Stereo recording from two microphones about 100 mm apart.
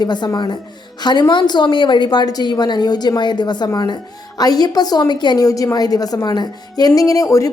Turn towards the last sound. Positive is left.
turn(degrees=35)  # may be behind; listen again after turning